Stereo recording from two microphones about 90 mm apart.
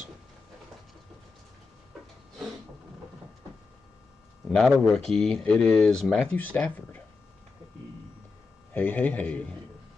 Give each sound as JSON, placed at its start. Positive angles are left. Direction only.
{"t": 4.5, "sound": "speech", "side_deg": 5}
{"t": 6.1, "sound": "speech", "side_deg": 20}
{"t": 8.7, "sound": "speech", "side_deg": 20}